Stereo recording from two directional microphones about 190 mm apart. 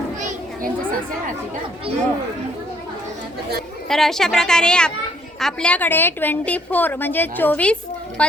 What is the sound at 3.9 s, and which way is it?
A woman's voice, centre (ahead or behind).